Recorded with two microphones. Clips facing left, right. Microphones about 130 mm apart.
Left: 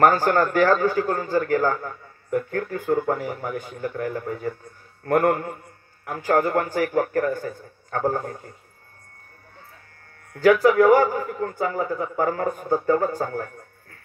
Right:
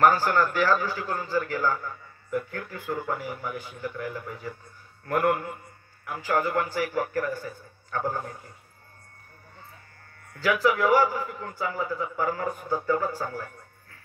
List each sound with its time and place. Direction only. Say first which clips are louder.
0.0 s a man's voice: left 3 dB; 45° left (ahead or behind)
10.3 s a man's voice: left 8 dB; 45° left (ahead or behind)
13.2 s a sound: left 6 dB; 50° left (ahead or behind)